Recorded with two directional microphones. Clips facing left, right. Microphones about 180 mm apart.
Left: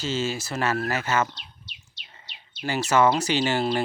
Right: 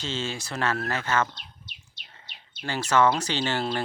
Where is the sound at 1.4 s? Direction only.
50° right (ahead or behind).